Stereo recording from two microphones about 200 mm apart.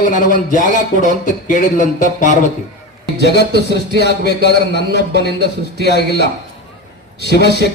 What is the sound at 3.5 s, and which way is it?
A man's voice, 60° left (ahead or behind).